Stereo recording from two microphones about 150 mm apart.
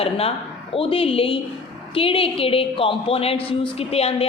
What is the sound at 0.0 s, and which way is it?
A woman's voice, 40° left (ahead or behind).